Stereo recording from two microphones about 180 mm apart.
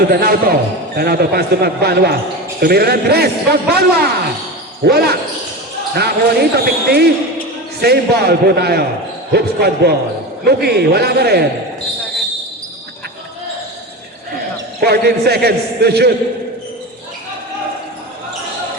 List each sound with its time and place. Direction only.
0.1 s a man's voice: 55° right (ahead or behind)
14.8 s a man's voice: 60° right (ahead or behind)